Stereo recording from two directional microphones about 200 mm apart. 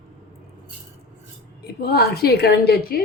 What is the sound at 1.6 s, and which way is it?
A woman's voice, 50° left (ahead or behind).